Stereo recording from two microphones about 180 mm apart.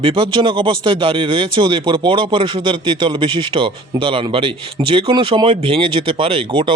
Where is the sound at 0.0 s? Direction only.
25° right (ahead or behind).